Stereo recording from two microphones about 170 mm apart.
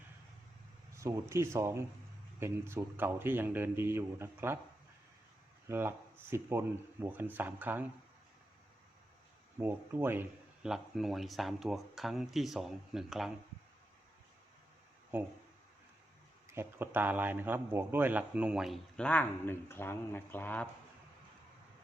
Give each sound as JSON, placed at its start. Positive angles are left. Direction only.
{"t": 0.9, "sound": "speech", "side_deg": -15}
{"t": 5.6, "sound": "speech", "side_deg": -15}
{"t": 9.6, "sound": "speech", "side_deg": -15}
{"t": 15.1, "sound": "speech", "side_deg": -10}
{"t": 16.5, "sound": "speech", "side_deg": -15}